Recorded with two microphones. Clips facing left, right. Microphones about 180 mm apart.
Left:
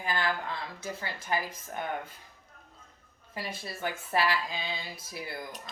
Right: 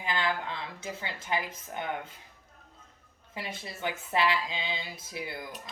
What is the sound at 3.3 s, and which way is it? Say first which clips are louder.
Speech: left 1 dB; 20° right (ahead or behind).